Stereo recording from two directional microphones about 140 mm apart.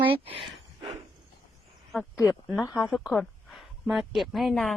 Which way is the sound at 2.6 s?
30° left (ahead or behind).